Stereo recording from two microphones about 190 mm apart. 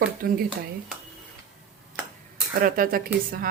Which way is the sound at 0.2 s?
50° right (ahead or behind).